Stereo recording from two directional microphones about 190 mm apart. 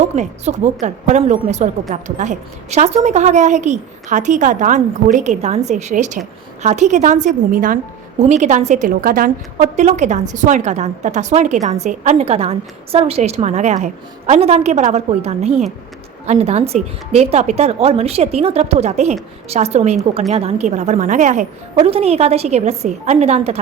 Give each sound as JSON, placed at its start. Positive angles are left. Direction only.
{"t": 0.0, "sound": "a woman's voice", "side_deg": -35}